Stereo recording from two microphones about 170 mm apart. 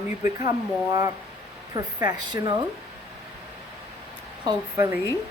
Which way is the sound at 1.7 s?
25° right (ahead or behind).